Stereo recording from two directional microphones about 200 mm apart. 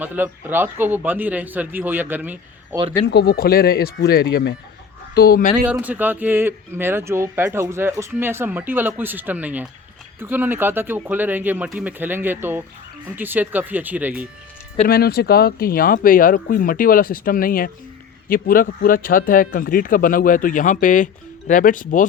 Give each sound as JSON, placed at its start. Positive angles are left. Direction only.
{"t": 0.0, "sound": "speech", "side_deg": -10}
{"t": 3.1, "sound": "speech", "side_deg": 50}
{"t": 5.6, "sound": "speech", "side_deg": -10}
{"t": 14.8, "sound": "speech", "side_deg": 50}